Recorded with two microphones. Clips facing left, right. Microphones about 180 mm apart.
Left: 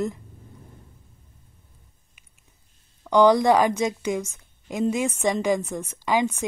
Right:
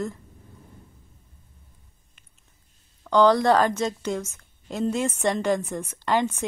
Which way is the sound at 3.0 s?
15° left (ahead or behind).